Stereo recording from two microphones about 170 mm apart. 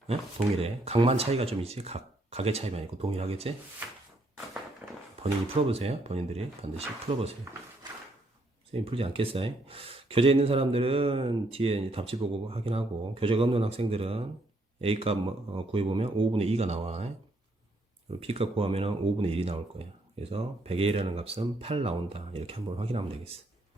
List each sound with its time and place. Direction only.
0.1 s speech: 35° right (ahead or behind)
5.2 s speech: 35° right (ahead or behind)
8.7 s speech: 35° right (ahead or behind)
18.2 s speech: 35° right (ahead or behind)